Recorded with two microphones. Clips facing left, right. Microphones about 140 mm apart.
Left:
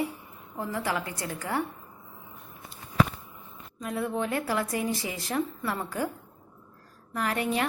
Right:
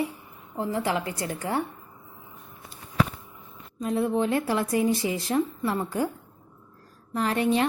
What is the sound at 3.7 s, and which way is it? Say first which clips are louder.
Speech: right 5 dB; 25° right (ahead or behind).